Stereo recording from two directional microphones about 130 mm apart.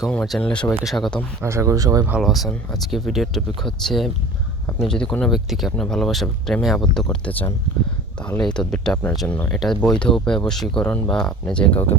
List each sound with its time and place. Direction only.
0.1 s speech: 5° left (ahead or behind)
0.7 s speech: 10° right (ahead or behind)
0.9 s speech: 5° left (ahead or behind)
1.4 s speech: 20° right (ahead or behind)
2.2 s speech: centre (ahead or behind)
8.5 s speech: 5° left (ahead or behind)